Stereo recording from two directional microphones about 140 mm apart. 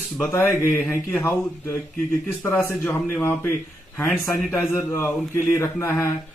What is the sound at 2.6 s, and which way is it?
A man's voice, 15° left (ahead or behind).